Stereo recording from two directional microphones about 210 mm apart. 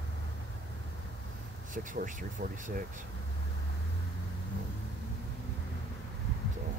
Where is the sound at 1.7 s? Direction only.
40° right (ahead or behind).